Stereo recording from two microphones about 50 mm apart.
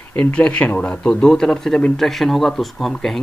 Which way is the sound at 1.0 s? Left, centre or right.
Centre.